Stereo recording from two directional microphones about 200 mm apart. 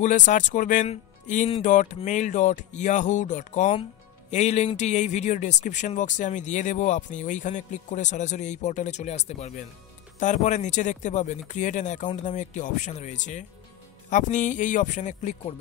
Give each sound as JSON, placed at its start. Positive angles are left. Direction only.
{"t": 0.0, "sound": "a man's voice", "side_deg": 40}